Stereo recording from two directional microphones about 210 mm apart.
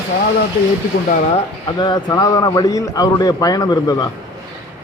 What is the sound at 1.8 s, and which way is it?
A man's voice, 20° left (ahead or behind).